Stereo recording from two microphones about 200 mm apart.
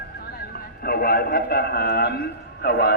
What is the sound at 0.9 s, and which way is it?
A man's voice, 50° left (ahead or behind).